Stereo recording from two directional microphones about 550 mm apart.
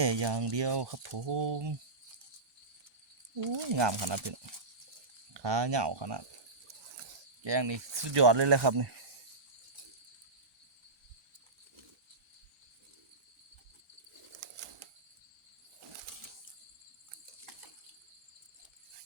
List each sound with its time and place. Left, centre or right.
0.0 s speech: right
3.4 s speech: right
7.4 s speech: right
14.6 s a sound: right